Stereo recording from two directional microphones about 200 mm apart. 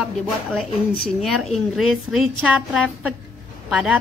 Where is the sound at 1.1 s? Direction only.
Centre (ahead or behind).